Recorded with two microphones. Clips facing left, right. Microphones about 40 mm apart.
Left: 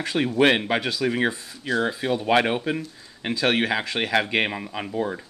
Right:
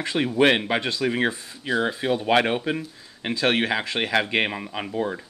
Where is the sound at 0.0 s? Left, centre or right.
Centre.